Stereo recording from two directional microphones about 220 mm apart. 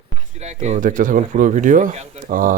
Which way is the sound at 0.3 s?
30° right (ahead or behind).